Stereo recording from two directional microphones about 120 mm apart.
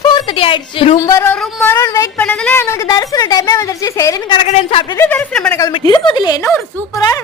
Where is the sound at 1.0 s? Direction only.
25° left (ahead or behind).